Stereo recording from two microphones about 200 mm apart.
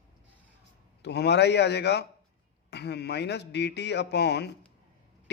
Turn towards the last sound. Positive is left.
turn(degrees=55)  # may be behind; listen again after turning